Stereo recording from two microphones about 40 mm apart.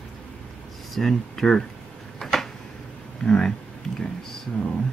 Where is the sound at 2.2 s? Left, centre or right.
Centre.